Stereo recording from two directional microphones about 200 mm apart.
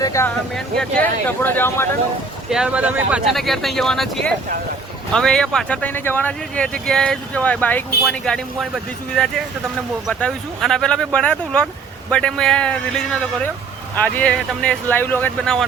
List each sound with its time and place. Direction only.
0.0 s speech: 15° left (ahead or behind)
0.5 s speech: 5° left (ahead or behind)
2.5 s speech: 5° right (ahead or behind)